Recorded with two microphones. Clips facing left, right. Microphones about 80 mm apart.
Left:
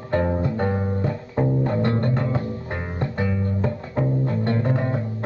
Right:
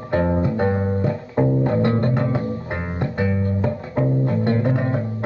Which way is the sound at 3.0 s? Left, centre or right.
Centre.